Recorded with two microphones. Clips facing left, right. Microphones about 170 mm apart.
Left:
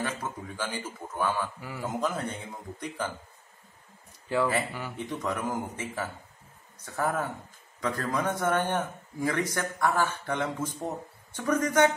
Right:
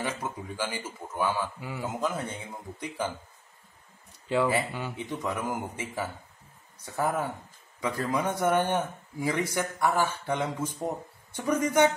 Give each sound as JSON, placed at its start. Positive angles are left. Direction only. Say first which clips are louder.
{"t": 0.0, "sound": "a man's voice", "louder": "even", "side_deg": -10}
{"t": 1.9, "sound": "speech", "louder": "left 1 dB", "side_deg": -5}
{"t": 4.3, "sound": "a man's voice", "louder": "right 1 dB", "side_deg": -15}